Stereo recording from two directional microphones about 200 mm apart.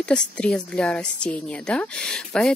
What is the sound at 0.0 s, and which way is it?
Speech, 5° left (ahead or behind).